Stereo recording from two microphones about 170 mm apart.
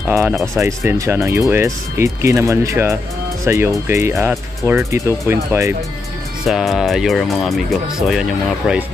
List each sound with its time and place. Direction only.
0.0 s speech: 10° right (ahead or behind)
6.4 s speech: centre (ahead or behind)